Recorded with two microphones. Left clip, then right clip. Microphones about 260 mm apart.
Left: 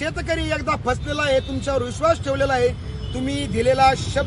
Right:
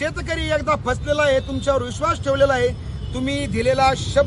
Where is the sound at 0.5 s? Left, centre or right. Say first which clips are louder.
Right 2 dB; centre.